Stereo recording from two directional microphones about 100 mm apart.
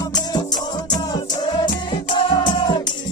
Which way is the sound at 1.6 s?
50° left (ahead or behind).